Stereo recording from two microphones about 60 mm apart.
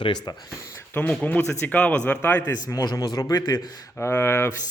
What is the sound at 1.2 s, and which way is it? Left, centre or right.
Speech, left.